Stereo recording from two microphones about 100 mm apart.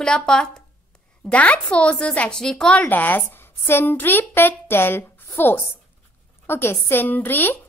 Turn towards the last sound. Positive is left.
turn(degrees=20)  # may be behind; listen again after turning